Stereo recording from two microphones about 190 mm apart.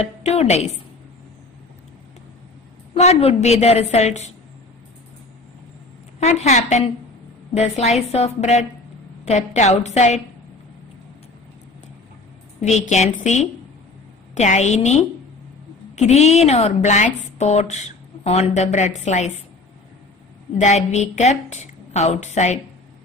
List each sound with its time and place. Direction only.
0.0 s a woman's voice: 35° left (ahead or behind)
2.9 s a woman's voice: 35° left (ahead or behind)
6.1 s a woman's voice: 35° left (ahead or behind)
12.6 s a woman's voice: 40° left (ahead or behind)
20.5 s a woman's voice: 35° left (ahead or behind)